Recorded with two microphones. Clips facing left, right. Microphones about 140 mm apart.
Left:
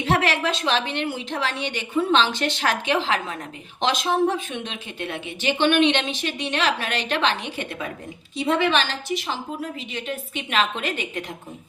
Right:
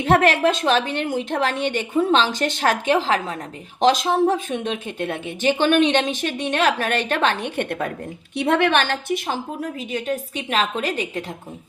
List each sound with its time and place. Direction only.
0.0 s speech: 50° right (ahead or behind)